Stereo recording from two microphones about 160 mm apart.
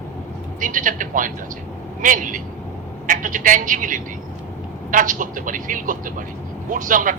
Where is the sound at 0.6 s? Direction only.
55° right (ahead or behind).